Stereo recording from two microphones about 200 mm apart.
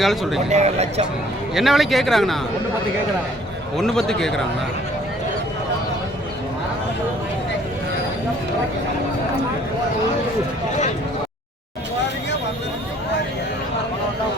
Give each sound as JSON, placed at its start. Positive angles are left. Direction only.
{"t": 0.0, "sound": "speech", "side_deg": 0}
{"t": 0.5, "sound": "a man's voice", "side_deg": -35}
{"t": 1.5, "sound": "speech", "side_deg": 0}
{"t": 3.8, "sound": "speech", "side_deg": 0}